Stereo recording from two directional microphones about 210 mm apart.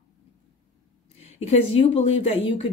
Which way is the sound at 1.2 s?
30° left (ahead or behind).